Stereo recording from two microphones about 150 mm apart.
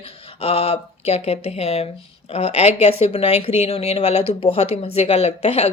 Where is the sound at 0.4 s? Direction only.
40° left (ahead or behind).